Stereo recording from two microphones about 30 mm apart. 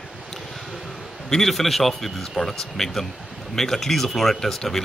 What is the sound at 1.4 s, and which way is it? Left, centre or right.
A man's voice, centre.